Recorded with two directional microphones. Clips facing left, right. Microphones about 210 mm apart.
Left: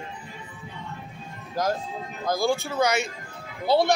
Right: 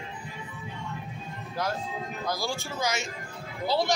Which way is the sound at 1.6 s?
45° left (ahead or behind).